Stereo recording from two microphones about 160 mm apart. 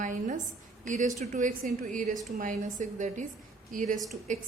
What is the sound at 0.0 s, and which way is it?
A woman's voice, 55° right (ahead or behind).